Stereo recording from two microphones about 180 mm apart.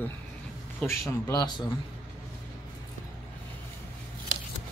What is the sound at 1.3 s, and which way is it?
Speech, 20° left (ahead or behind).